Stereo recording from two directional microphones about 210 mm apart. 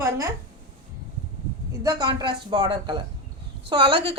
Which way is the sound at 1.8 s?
15° right (ahead or behind).